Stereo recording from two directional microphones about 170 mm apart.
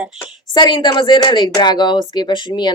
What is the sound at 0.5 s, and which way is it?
Speech, 25° left (ahead or behind).